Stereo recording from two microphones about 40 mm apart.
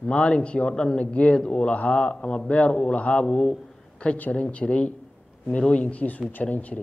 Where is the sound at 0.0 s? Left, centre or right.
Left.